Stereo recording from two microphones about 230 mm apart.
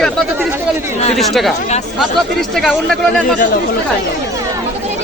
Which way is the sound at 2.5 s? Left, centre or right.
Centre.